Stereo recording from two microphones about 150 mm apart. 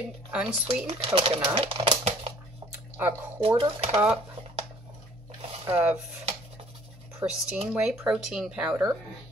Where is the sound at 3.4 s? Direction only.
35° right (ahead or behind).